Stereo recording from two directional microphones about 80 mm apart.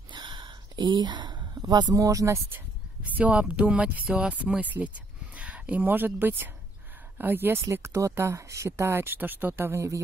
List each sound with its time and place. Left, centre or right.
0.1 s a sound: right
1.6 s speech: right
2.5 s speech: centre; by 10.0 s right